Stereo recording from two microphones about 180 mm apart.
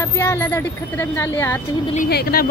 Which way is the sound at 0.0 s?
15° left (ahead or behind).